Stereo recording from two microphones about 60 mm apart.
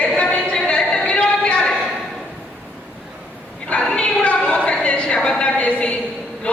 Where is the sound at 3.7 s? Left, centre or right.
Centre.